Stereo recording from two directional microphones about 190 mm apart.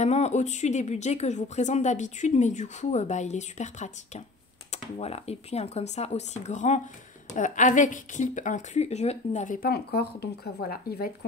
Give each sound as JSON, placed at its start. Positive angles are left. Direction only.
{"t": 0.0, "sound": "speech", "side_deg": 35}